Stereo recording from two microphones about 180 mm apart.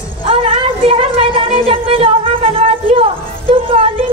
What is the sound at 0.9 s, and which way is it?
Music, 30° right (ahead or behind).